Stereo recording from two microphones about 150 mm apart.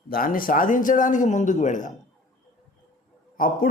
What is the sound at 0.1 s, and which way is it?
Speech, 70° left (ahead or behind).